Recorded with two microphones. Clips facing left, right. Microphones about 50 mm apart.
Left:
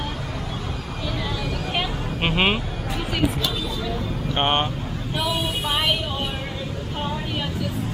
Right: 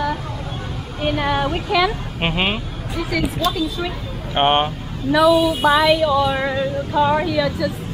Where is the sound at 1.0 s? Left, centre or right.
Right.